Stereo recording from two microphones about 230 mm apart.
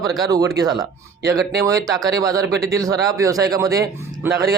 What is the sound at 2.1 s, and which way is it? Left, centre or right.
Speech, centre.